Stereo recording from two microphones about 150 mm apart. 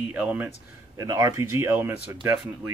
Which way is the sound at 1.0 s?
20° right (ahead or behind).